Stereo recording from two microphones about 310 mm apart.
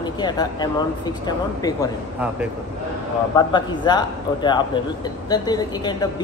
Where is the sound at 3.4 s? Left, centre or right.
Centre.